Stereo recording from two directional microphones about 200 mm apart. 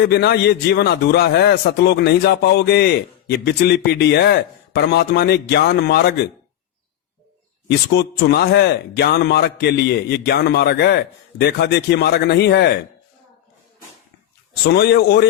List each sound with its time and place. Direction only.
0.0 s a man's voice: 55° left (ahead or behind)
8.3 s a man's voice: 55° left (ahead or behind)
14.7 s a man's voice: 55° left (ahead or behind)